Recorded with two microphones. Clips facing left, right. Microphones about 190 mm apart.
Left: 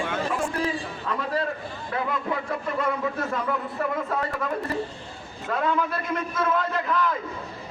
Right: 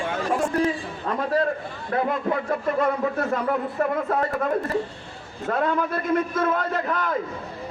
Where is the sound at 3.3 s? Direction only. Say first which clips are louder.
Right 4 dB; 45° right (ahead or behind).